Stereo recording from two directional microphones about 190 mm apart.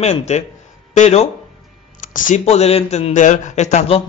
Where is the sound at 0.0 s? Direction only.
35° left (ahead or behind).